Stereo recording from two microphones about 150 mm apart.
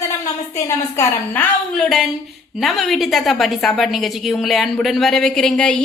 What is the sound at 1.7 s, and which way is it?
A woman's voice, 5° left (ahead or behind).